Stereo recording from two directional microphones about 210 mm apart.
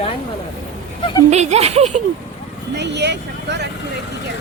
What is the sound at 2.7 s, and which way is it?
Speech, 55° right (ahead or behind).